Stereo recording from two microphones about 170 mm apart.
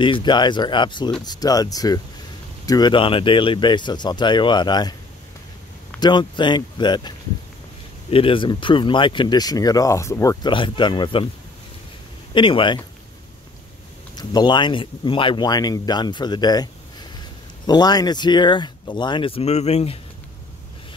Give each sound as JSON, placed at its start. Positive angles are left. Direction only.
{"t": 0.0, "sound": "speech", "side_deg": 30}
{"t": 5.9, "sound": "speech", "side_deg": 25}
{"t": 12.4, "sound": "speech", "side_deg": 30}
{"t": 14.1, "sound": "speech", "side_deg": 25}
{"t": 17.6, "sound": "speech", "side_deg": 25}